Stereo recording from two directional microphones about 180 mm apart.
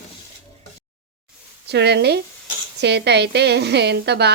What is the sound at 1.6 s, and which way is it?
A woman's voice, 65° right (ahead or behind).